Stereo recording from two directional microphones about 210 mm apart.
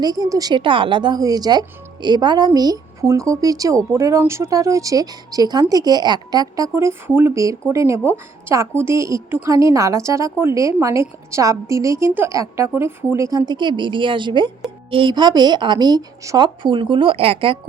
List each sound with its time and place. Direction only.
0.0 s a woman's voice: 15° right (ahead or behind)